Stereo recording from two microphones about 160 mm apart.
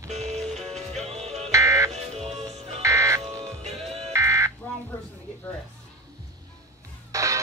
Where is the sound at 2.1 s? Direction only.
40° right (ahead or behind).